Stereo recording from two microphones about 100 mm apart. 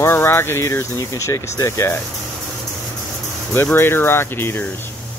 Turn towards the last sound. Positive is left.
turn(degrees=20)  # may be behind; listen again after turning